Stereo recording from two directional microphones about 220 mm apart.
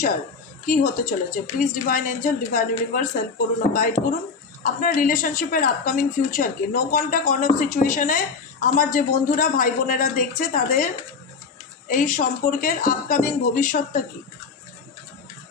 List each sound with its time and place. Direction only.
0.6 s a woman's voice: 35° left (ahead or behind)
11.9 s a woman's voice: 35° left (ahead or behind)